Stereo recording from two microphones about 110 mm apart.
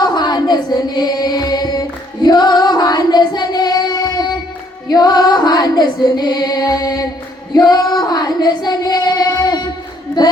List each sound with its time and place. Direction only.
0.0 s chant: 40° left (ahead or behind)
2.2 s female singing: 40° left (ahead or behind)
7.5 s child singing: 40° left (ahead or behind)
10.2 s a sound: 40° left (ahead or behind)